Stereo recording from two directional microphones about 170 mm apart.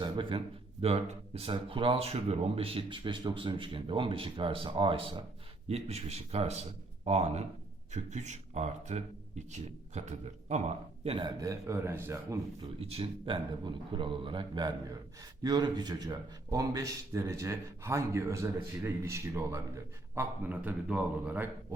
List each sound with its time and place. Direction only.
0.0 s speech: 30° right (ahead or behind)
12.8 s a man's voice: 35° right (ahead or behind); by 21.5 s 10° right (ahead or behind)